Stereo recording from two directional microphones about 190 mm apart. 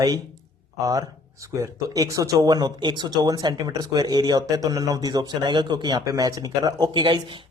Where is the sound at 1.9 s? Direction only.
20° right (ahead or behind).